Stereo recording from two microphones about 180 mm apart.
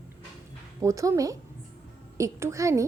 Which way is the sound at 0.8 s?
15° right (ahead or behind).